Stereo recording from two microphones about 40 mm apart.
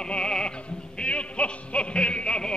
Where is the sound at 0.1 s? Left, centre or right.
Left.